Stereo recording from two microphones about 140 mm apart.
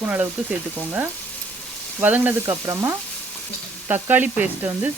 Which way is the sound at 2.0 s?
10° right (ahead or behind).